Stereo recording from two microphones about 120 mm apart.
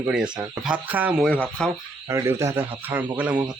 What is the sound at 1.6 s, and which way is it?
Speech, 10° left (ahead or behind).